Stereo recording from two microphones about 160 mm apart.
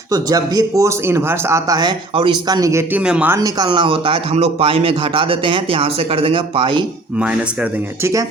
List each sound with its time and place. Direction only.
0.1 s speech: 25° right (ahead or behind)
3.0 s speech: 5° right (ahead or behind)
3.3 s speech: 25° right (ahead or behind)
7.2 s speech: 10° right (ahead or behind)